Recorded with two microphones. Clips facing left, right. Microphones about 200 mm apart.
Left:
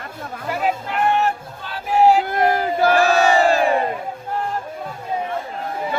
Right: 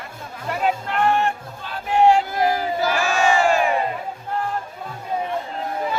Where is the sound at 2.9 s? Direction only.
35° left (ahead or behind).